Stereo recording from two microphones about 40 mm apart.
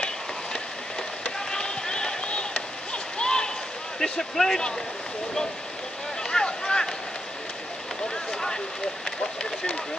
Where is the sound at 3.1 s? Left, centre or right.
Left.